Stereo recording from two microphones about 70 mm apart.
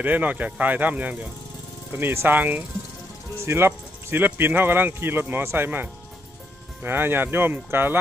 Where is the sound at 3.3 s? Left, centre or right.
Right.